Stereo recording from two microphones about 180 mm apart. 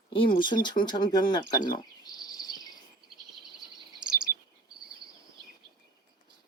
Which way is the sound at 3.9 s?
25° right (ahead or behind).